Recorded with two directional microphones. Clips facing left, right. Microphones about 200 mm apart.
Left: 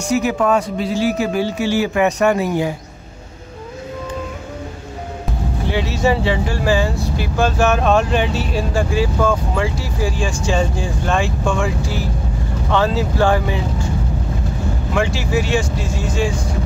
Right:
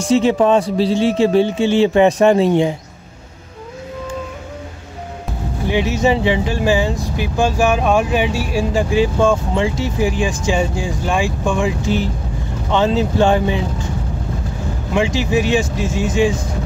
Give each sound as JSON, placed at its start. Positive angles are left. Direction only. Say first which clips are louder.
{"t": 0.1, "sound": "a man's voice", "louder": "right 4 dB", "side_deg": -25}
{"t": 5.7, "sound": "a man's voice", "louder": "right 2 dB", "side_deg": -15}
{"t": 15.1, "sound": "speech", "louder": "right 3 dB", "side_deg": -15}